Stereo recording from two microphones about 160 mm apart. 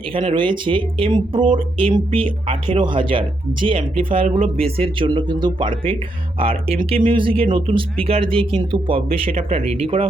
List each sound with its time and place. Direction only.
0.3 s speech: 30° right (ahead or behind)